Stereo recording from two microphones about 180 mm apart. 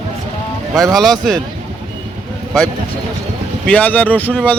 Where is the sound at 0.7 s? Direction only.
20° right (ahead or behind).